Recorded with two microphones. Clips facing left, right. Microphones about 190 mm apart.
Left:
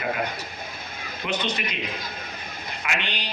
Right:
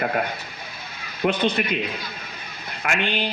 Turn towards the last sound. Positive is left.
turn(degrees=-55)  # may be behind; listen again after turning